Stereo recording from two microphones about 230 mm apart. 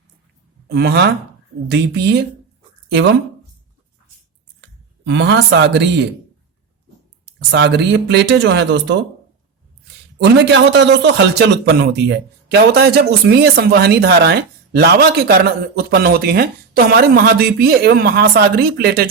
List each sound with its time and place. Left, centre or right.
0.7 s a man's voice: right
4.6 s speech: right
7.5 s a man's voice: right